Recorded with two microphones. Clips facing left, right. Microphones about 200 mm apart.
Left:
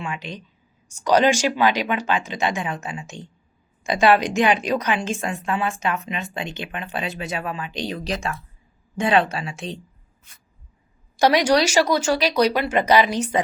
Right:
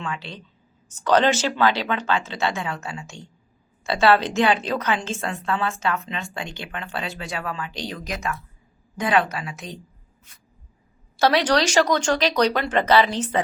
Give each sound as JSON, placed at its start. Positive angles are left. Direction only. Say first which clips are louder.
{"t": 0.0, "sound": "a woman's voice", "louder": "left 1 dB", "side_deg": 15}
{"t": 11.2, "sound": "a woman's voice", "louder": "left 2 dB", "side_deg": 10}